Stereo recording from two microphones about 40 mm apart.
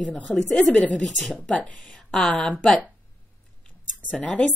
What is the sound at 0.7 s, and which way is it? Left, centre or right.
Speech, left.